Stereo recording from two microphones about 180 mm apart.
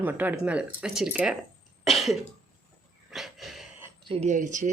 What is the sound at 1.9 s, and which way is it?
Cough, centre (ahead or behind).